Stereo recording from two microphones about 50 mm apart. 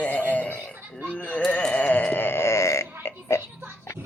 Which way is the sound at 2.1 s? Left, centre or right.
Left.